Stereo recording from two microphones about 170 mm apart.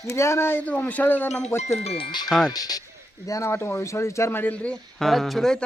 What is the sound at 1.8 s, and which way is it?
Speech, 30° left (ahead or behind).